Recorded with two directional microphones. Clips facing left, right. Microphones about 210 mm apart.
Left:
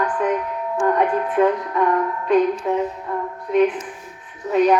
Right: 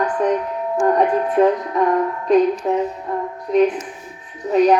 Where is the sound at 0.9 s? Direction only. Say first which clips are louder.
Right 2 dB; 35° right (ahead or behind).